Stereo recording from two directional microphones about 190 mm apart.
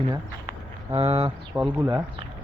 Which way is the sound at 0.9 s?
30° right (ahead or behind).